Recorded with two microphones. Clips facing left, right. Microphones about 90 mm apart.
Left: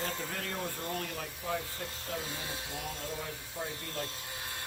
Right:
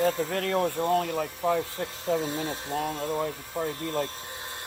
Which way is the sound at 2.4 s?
45° right (ahead or behind).